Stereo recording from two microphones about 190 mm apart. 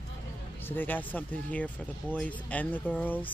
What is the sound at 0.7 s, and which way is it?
Speech, 10° left (ahead or behind).